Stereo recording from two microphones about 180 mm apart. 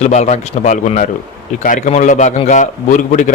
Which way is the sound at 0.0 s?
40° left (ahead or behind).